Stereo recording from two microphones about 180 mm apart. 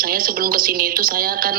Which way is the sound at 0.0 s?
55° right (ahead or behind).